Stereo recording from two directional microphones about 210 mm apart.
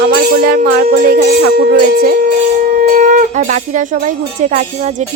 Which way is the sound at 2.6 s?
40° right (ahead or behind).